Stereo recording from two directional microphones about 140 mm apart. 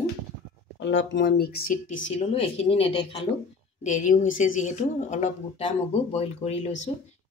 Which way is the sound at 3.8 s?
65° left (ahead or behind).